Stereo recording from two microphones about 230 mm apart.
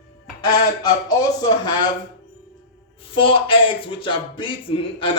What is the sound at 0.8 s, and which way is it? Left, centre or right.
Speech, centre.